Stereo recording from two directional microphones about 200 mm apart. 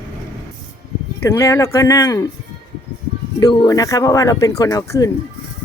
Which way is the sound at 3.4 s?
20° left (ahead or behind).